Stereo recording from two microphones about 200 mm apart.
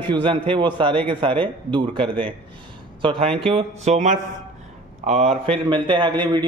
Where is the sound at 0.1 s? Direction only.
25° right (ahead or behind).